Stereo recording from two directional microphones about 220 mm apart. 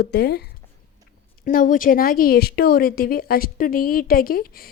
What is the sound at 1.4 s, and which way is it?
A woman's voice, 40° left (ahead or behind).